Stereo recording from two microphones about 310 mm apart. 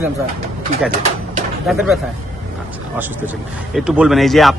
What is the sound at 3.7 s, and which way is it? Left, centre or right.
Speech, centre.